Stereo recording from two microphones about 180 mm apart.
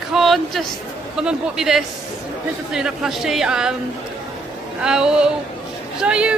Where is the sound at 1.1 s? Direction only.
5° right (ahead or behind).